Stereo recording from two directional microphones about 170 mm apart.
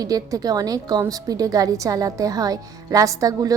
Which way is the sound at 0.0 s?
20° right (ahead or behind).